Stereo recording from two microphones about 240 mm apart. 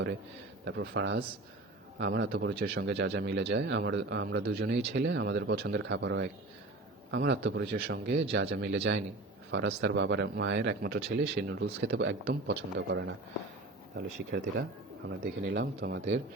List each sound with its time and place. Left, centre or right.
0.6 s speech: right